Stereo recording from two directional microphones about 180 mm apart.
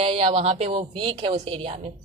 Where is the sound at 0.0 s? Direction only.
30° right (ahead or behind).